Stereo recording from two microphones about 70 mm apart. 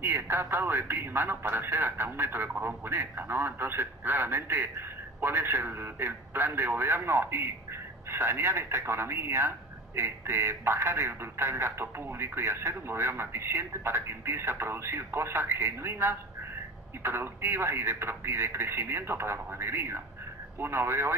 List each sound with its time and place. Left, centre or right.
0.0 s speech: right